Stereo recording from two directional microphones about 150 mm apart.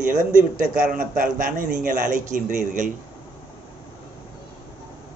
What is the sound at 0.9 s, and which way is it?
Speech, 65° right (ahead or behind).